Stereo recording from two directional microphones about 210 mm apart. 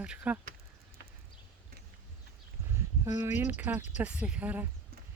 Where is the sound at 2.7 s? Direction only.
15° right (ahead or behind).